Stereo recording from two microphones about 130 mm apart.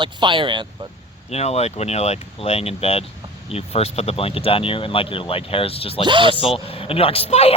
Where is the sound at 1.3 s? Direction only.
55° left (ahead or behind).